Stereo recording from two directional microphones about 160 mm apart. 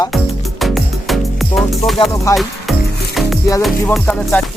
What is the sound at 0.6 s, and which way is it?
Music, centre (ahead or behind).